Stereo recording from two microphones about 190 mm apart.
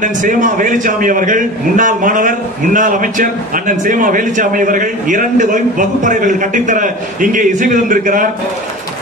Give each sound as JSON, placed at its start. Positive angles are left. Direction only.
{"t": 0.0, "sound": "a man's voice", "side_deg": -45}